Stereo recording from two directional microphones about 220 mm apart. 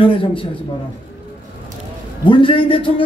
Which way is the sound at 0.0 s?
25° left (ahead or behind).